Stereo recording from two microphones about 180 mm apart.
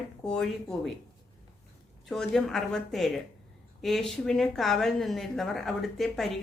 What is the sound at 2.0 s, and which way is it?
Speech, centre (ahead or behind).